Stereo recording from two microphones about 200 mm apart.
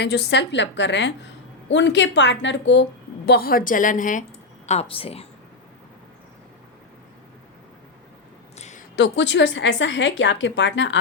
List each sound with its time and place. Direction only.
0.0 s speech: 60° left (ahead or behind)
3.2 s a woman's voice: 50° left (ahead or behind); by 5.2 s 30° left (ahead or behind)
8.5 s a sound: 35° left (ahead or behind)
9.0 s speech: 60° left (ahead or behind)